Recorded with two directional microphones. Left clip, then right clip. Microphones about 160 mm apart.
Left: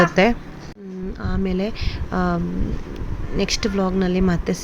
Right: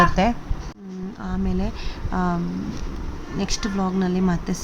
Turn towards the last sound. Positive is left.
turn(degrees=25)  # may be behind; listen again after turning